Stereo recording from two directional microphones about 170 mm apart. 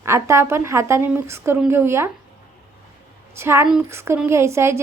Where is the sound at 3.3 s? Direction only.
15° right (ahead or behind).